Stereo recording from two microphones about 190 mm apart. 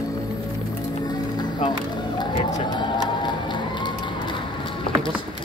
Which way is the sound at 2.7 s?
25° left (ahead or behind).